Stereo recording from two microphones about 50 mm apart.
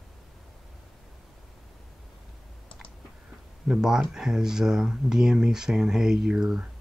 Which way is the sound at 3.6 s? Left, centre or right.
Centre.